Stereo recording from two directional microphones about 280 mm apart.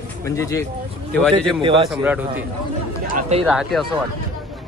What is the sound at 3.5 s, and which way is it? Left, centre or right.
Speech, centre.